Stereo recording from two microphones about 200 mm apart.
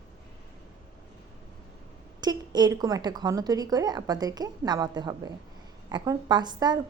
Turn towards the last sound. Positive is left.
turn(degrees=-20)  # may be behind; listen again after turning